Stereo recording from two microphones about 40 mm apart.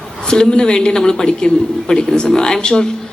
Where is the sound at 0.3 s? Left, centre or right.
Centre.